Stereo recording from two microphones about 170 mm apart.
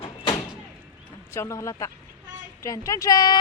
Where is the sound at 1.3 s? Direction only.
15° left (ahead or behind).